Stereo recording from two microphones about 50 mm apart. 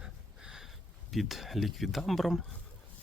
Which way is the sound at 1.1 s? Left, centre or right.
Centre.